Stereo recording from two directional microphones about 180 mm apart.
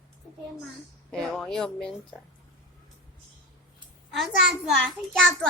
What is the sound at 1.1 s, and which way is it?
Speech, 5° left (ahead or behind).